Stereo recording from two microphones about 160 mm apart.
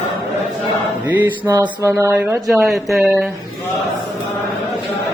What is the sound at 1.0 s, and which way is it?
Speech, 10° right (ahead or behind).